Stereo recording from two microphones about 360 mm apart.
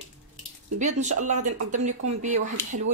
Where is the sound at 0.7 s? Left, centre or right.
Centre.